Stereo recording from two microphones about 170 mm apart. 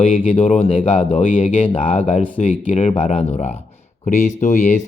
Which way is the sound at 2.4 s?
40° left (ahead or behind).